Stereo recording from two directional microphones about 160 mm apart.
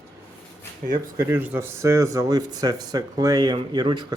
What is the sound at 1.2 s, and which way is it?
Speech, 10° right (ahead or behind).